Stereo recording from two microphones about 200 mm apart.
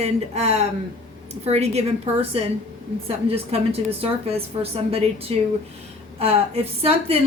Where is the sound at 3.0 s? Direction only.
30° right (ahead or behind).